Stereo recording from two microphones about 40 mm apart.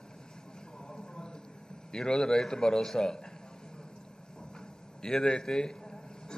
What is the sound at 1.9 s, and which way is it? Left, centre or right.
A man's voice, centre.